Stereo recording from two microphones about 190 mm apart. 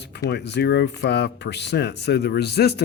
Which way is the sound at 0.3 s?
60° left (ahead or behind).